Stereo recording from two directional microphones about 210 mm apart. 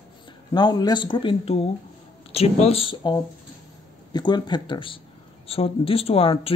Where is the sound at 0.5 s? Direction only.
20° left (ahead or behind).